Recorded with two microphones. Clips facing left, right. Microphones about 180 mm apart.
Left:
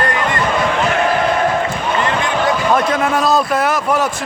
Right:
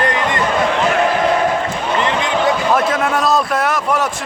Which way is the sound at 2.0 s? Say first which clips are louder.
Even; 20° right (ahead or behind).